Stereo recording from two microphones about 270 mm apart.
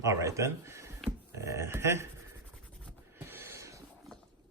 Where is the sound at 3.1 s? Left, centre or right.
Centre.